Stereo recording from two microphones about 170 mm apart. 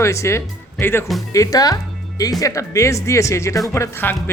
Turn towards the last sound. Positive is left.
turn(degrees=10)  # may be behind; listen again after turning